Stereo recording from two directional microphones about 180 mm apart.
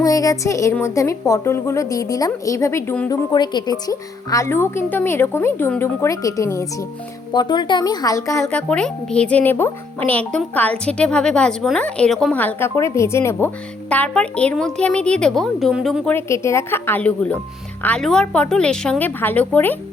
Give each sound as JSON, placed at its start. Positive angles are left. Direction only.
{"t": 0.0, "sound": "a woman's voice", "side_deg": 20}
{"t": 3.1, "sound": "a woman's voice", "side_deg": 25}
{"t": 16.1, "sound": "a woman's voice", "side_deg": 15}